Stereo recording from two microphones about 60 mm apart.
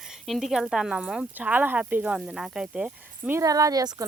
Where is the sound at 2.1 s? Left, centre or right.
Centre.